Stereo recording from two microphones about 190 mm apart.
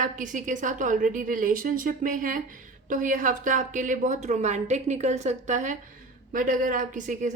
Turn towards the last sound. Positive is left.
turn(degrees=-40)  # may be behind; listen again after turning